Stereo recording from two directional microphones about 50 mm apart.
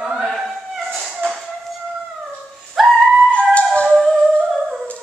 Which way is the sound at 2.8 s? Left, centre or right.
Centre.